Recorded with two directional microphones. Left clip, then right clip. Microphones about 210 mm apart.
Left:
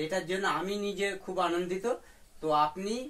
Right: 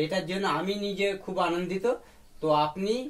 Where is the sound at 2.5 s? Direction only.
15° right (ahead or behind).